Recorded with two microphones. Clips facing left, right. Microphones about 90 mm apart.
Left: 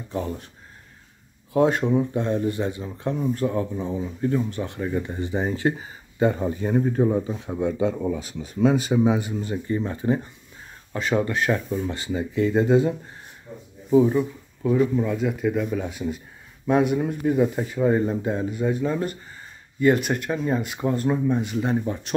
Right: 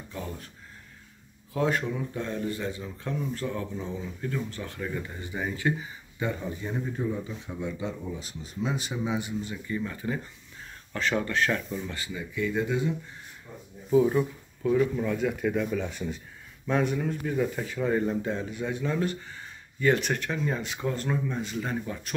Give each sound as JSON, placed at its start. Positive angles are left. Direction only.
{"t": 1.5, "sound": "speech", "side_deg": 25}
{"t": 8.7, "sound": "a man's voice", "side_deg": 55}
{"t": 9.8, "sound": "speech", "side_deg": 30}
{"t": 10.9, "sound": "speech", "side_deg": 15}
{"t": 12.1, "sound": "a man's voice", "side_deg": 45}
{"t": 14.6, "sound": "speech", "side_deg": 10}
{"t": 18.5, "sound": "speech", "side_deg": 5}